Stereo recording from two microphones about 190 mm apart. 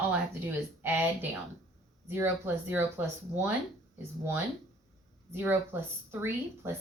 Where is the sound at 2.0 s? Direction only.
10° right (ahead or behind).